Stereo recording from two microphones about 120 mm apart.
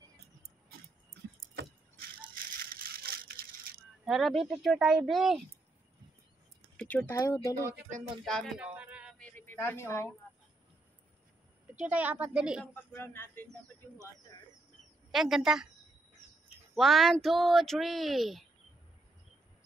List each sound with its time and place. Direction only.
4.0 s speech: centre (ahead or behind)
6.8 s a sound: 10° left (ahead or behind)
7.1 s speech: 25° left (ahead or behind)
8.3 s speech: 5° left (ahead or behind)
8.5 s a sound: 10° right (ahead or behind)
9.2 s a sound: 20° left (ahead or behind)
11.8 s a woman's voice: 15° right (ahead or behind)
12.7 s speech: 20° left (ahead or behind)
15.0 s speech: centre (ahead or behind)
16.7 s speech: centre (ahead or behind)